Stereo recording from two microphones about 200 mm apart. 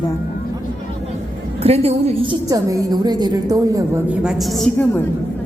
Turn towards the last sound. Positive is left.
turn(degrees=5)  # may be behind; listen again after turning